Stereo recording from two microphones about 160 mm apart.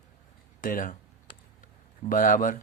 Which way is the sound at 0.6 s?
60° left (ahead or behind).